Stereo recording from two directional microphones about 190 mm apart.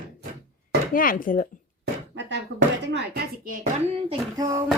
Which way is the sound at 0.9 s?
45° left (ahead or behind).